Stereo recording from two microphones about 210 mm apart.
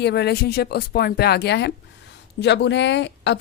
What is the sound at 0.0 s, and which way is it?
A woman's voice, 50° left (ahead or behind).